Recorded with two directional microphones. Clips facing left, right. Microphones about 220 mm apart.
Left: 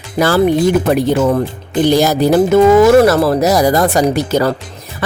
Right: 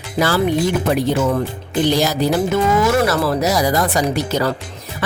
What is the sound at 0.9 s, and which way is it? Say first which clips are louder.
Speech: left 5 dB; 50° left (ahead or behind).